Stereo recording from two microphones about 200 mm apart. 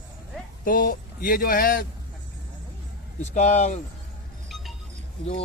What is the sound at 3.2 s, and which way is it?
Speech, 35° left (ahead or behind).